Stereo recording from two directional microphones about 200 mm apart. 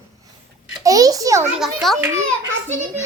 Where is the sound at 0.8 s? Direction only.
15° right (ahead or behind).